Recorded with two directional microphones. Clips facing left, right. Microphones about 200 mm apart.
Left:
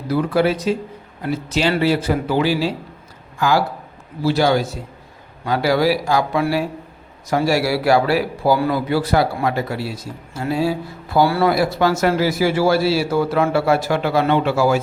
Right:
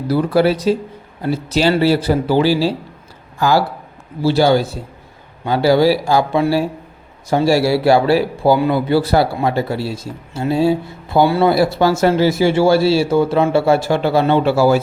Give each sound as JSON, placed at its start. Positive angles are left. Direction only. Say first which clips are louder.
{"t": 0.1, "sound": "a man's voice", "louder": "right 3 dB", "side_deg": -35}